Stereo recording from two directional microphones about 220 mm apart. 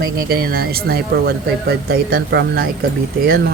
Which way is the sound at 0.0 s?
45° right (ahead or behind).